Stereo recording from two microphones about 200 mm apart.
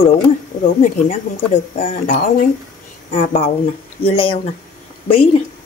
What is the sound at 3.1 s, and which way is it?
A woman's voice, 30° left (ahead or behind).